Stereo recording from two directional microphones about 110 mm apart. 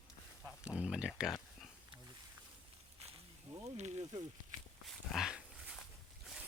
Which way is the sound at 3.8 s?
85° right.